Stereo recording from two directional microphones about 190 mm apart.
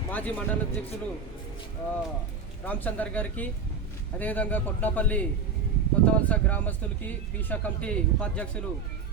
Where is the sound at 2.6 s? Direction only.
10° left (ahead or behind).